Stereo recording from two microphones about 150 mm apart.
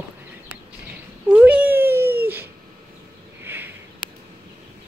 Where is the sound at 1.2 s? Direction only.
10° right (ahead or behind).